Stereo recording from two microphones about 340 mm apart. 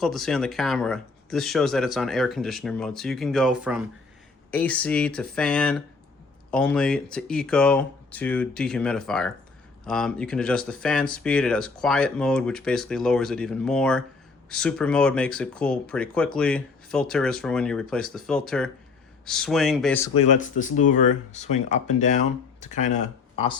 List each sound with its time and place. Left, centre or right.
0.0 s speech: centre
20.1 s speech: left